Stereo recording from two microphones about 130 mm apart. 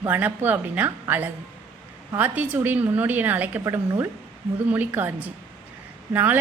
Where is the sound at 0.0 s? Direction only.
15° right (ahead or behind).